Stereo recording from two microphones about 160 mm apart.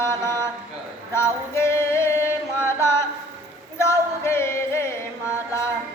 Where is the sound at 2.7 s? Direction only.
15° left (ahead or behind).